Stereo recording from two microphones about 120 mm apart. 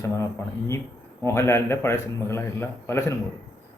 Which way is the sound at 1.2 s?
20° left (ahead or behind).